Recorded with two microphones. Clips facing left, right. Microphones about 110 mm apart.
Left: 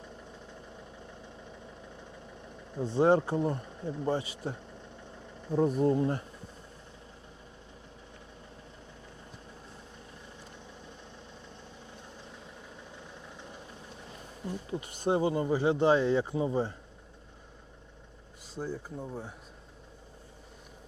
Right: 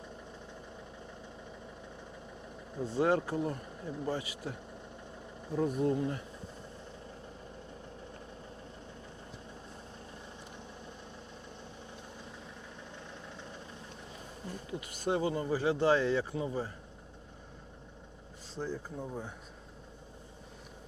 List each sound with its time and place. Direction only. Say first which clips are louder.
2.8 s speech: left 5 dB; 25° left (ahead or behind)
14.7 s speech: left 4 dB; 25° left (ahead or behind)
18.5 s speech: left 1 dB; 5° left (ahead or behind)